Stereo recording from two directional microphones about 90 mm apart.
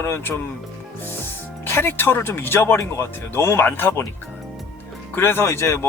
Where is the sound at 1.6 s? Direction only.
25° left (ahead or behind).